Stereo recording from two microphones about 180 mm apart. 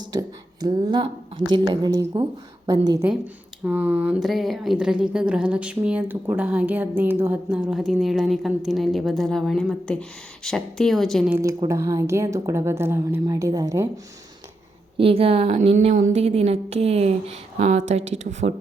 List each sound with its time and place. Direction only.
0.0 s a woman's voice: 20° right (ahead or behind)
3.6 s a woman's voice: 10° right (ahead or behind)
11.3 s speech: 10° right (ahead or behind)
14.9 s a woman's voice: 30° right (ahead or behind)